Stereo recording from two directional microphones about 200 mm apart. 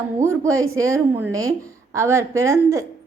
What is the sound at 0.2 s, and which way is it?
A woman's voice, 15° right (ahead or behind).